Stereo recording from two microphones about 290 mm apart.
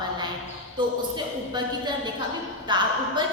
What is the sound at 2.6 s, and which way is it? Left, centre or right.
Speech, centre.